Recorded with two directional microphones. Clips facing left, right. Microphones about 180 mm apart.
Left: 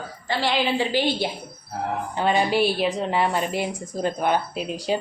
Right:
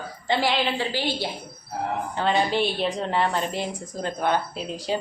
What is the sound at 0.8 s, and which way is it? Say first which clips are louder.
Speech: left 4 dB; 15° left (ahead or behind).